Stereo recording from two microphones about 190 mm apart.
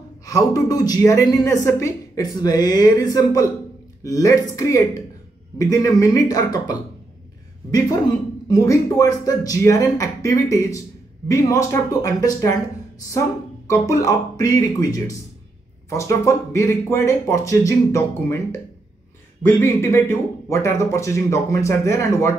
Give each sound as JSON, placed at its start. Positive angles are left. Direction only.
{"t": 0.2, "sound": "a woman's voice", "side_deg": 20}
{"t": 8.5, "sound": "speech", "side_deg": 15}
{"t": 13.7, "sound": "speech", "side_deg": 15}